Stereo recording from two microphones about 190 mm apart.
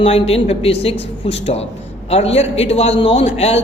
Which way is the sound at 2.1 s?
30° left (ahead or behind).